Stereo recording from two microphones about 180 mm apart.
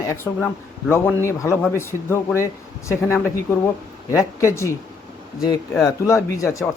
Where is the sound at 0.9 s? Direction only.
15° left (ahead or behind).